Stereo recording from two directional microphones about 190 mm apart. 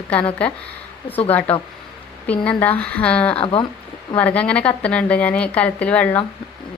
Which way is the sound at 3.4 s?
30° left (ahead or behind).